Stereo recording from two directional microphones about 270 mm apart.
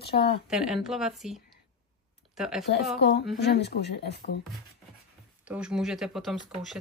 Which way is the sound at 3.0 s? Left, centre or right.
Left.